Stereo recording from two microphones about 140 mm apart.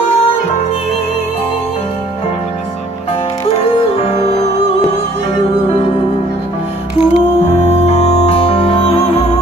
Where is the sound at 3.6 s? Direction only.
45° left (ahead or behind).